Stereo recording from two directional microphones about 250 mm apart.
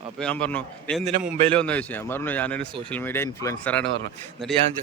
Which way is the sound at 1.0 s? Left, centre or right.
Right.